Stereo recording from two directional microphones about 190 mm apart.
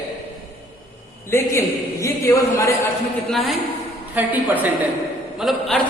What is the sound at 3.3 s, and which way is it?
A woman's voice, centre (ahead or behind).